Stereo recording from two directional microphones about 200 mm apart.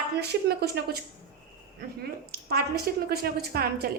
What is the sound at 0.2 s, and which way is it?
Speech, 55° right (ahead or behind).